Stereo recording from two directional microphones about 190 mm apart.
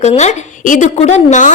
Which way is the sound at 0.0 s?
35° left (ahead or behind).